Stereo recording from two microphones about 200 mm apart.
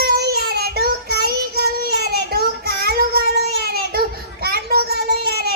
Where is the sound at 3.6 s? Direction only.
50° right (ahead or behind).